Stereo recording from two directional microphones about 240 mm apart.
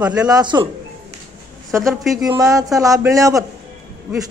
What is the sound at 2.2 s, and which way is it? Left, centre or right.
A man's voice, centre.